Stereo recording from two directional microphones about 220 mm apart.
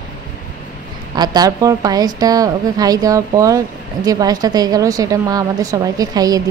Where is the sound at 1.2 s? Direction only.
15° right (ahead or behind).